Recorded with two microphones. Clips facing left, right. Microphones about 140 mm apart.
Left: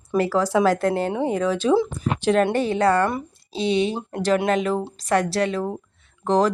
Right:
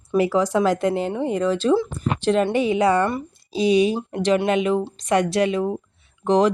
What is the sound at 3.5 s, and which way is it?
Speech, 25° left (ahead or behind).